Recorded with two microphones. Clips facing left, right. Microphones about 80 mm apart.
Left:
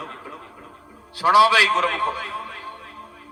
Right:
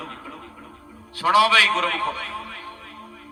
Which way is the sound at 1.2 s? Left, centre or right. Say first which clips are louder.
Left 2 dB; centre.